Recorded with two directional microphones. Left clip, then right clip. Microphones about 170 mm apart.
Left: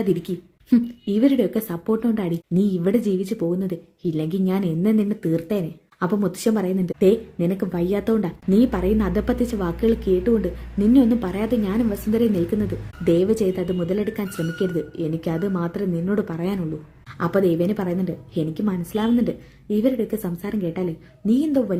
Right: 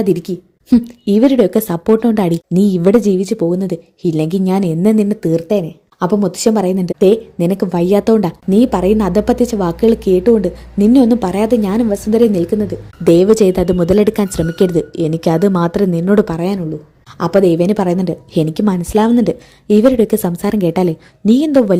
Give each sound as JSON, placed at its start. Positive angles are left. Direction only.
{"t": 0.0, "sound": "a woman's voice", "side_deg": -30}